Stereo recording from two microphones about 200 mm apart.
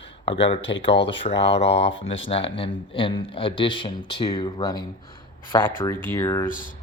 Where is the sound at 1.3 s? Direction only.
65° left (ahead or behind).